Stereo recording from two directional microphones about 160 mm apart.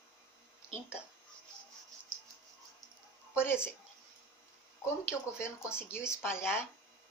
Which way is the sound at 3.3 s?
15° left (ahead or behind).